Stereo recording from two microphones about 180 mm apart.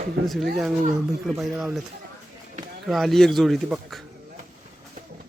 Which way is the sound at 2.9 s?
Centre (ahead or behind).